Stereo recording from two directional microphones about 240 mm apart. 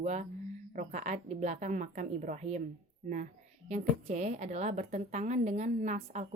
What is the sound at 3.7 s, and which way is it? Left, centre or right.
A woman's voice, right.